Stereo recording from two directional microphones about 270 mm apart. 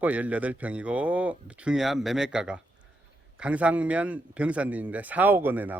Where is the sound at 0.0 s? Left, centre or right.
Centre.